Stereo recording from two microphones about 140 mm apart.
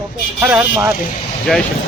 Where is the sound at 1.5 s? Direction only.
5° left (ahead or behind).